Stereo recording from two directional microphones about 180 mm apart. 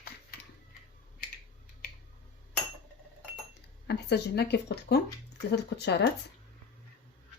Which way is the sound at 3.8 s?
65° left (ahead or behind).